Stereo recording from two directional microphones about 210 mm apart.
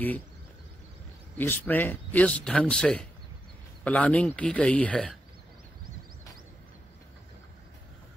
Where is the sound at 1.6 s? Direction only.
10° left (ahead or behind).